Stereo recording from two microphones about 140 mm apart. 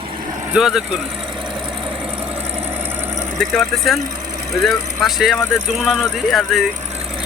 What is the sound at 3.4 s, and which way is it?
Speech, centre (ahead or behind).